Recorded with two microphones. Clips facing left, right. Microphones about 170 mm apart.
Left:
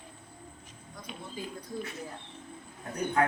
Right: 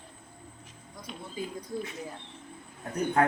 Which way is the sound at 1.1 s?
Centre (ahead or behind).